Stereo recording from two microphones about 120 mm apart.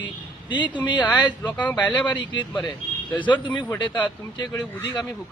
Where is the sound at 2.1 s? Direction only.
40° left (ahead or behind).